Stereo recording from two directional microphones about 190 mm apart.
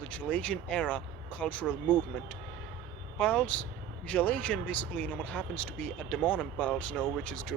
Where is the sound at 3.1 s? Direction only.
5° left (ahead or behind).